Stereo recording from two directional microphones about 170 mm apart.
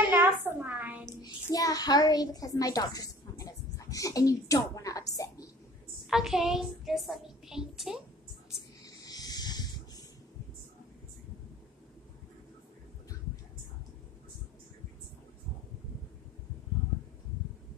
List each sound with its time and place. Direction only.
0.1 s a woman's voice: 10° right (ahead or behind)
1.0 s a child's voice: 25° left (ahead or behind)
6.0 s a woman's voice: centre (ahead or behind)
8.8 s a sound: 20° left (ahead or behind)